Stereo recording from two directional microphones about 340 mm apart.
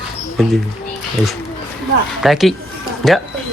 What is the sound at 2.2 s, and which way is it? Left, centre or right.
Speech, centre.